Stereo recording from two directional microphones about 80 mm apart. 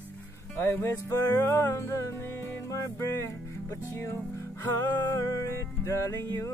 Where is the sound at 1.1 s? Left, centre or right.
Left.